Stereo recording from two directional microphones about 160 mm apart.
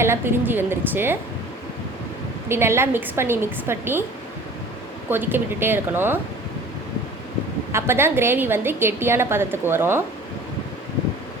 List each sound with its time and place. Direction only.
0.0 s a woman's voice: 15° right (ahead or behind)
2.5 s a woman's voice: 15° right (ahead or behind)
5.0 s a woman's voice: 10° right (ahead or behind)
7.7 s a woman's voice: 15° right (ahead or behind)